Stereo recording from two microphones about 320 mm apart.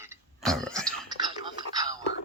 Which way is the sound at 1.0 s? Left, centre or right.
Centre.